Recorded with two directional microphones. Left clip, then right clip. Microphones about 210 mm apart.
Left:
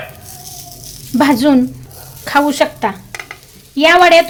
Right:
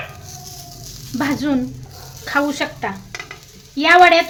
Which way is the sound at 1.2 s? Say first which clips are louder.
Left 9 dB; 45° left (ahead or behind).